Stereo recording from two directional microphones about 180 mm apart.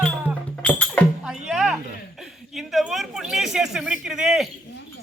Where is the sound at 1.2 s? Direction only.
5° right (ahead or behind).